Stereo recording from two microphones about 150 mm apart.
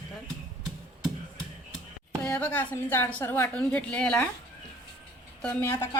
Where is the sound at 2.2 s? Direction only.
10° left (ahead or behind).